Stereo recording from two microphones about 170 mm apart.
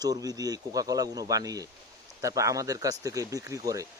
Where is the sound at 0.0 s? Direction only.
20° right (ahead or behind).